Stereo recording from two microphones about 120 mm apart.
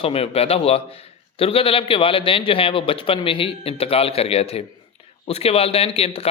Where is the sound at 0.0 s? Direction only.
55° left (ahead or behind).